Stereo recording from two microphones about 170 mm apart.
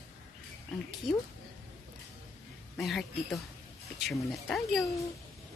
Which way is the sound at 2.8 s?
Centre (ahead or behind).